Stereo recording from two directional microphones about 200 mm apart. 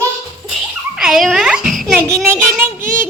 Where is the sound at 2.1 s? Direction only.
15° right (ahead or behind).